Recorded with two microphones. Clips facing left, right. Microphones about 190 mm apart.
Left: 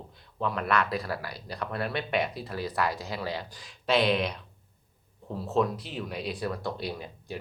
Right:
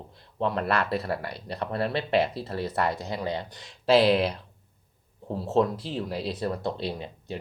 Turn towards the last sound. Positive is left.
turn(degrees=-25)  # may be behind; listen again after turning